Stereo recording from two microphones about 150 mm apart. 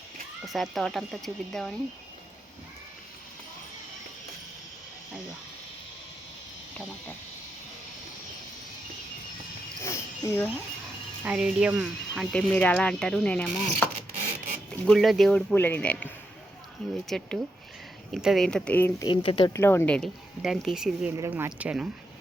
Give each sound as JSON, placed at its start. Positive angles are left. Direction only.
{"t": 0.4, "sound": "speech", "side_deg": 0}
{"t": 9.8, "sound": "a sound", "side_deg": 20}
{"t": 11.2, "sound": "speech", "side_deg": -5}
{"t": 14.2, "sound": "a sound", "side_deg": -55}
{"t": 14.7, "sound": "speech", "side_deg": 5}
{"t": 19.0, "sound": "speech", "side_deg": 35}
{"t": 19.5, "sound": "speech", "side_deg": 15}
{"t": 21.2, "sound": "speech", "side_deg": -15}